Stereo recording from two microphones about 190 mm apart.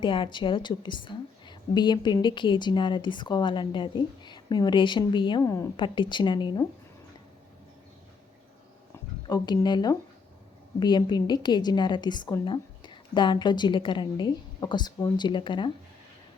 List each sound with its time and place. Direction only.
0.0 s a woman's voice: 25° left (ahead or behind)
9.2 s a woman's voice: 20° left (ahead or behind)